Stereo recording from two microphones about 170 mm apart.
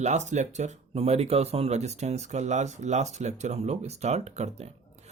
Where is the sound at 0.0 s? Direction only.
45° right (ahead or behind).